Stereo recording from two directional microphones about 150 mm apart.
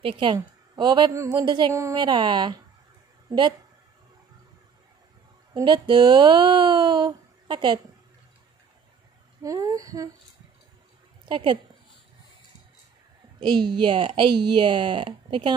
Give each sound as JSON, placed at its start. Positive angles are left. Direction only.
{"t": 0.0, "sound": "a woman's voice", "side_deg": -30}
{"t": 1.7, "sound": "a woman's voice", "side_deg": -20}
{"t": 2.0, "sound": "a woman's voice", "side_deg": -30}
{"t": 5.5, "sound": "speech", "side_deg": -30}
{"t": 9.4, "sound": "a woman's voice", "side_deg": -20}
{"t": 11.2, "sound": "speech", "side_deg": -35}
{"t": 13.4, "sound": "speech", "side_deg": -30}